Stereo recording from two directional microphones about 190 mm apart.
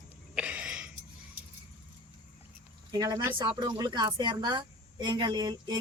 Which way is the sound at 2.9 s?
20° right (ahead or behind).